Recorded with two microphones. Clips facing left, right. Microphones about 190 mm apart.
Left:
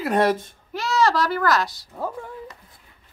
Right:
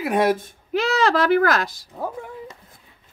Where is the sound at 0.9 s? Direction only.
55° right (ahead or behind).